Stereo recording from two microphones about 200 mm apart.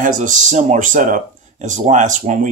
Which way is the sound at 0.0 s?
40° right (ahead or behind).